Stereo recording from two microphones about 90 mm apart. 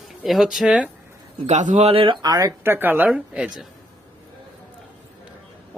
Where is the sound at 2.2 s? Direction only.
50° right (ahead or behind).